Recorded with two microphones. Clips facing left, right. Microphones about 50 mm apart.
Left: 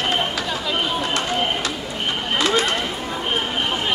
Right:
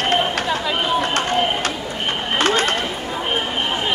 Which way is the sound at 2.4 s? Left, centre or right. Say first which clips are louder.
Right 2 dB; right.